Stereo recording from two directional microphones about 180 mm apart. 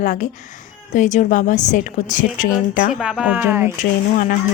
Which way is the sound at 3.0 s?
5° right (ahead or behind).